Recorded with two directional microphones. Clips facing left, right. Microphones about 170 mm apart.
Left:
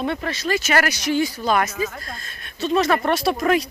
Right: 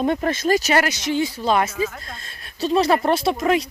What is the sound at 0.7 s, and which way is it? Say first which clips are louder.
Speech: even; 25° right (ahead or behind).